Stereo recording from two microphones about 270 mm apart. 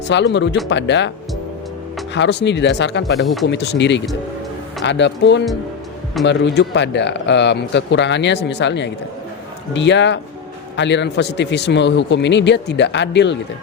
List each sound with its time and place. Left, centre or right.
0.1 s speech: left
2.1 s speech: left
3.2 s speech: centre
3.4 s speech: left